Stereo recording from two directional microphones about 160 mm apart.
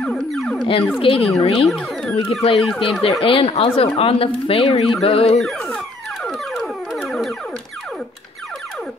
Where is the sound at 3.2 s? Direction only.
35° left (ahead or behind).